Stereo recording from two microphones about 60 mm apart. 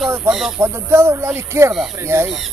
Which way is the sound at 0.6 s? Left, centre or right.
Right.